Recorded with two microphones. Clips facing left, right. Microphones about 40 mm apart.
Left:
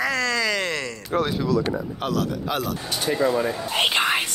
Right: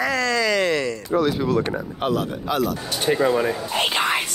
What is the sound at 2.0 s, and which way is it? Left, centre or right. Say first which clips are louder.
Speech: right 4 dB; centre.